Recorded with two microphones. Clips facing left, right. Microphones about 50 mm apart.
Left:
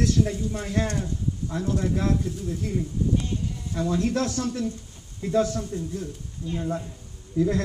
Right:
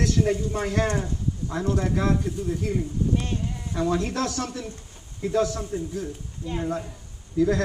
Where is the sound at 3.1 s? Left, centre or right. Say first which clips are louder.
Even; right.